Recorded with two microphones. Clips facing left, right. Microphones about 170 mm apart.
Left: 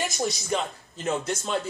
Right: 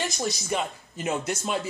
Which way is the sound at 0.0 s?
Centre (ahead or behind).